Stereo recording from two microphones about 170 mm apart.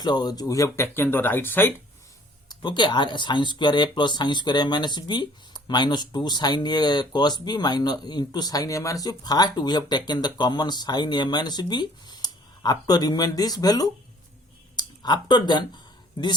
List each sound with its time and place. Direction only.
0.0 s speech: 25° left (ahead or behind)
2.5 s speech: 25° left (ahead or behind)
14.8 s a sound: 25° left (ahead or behind)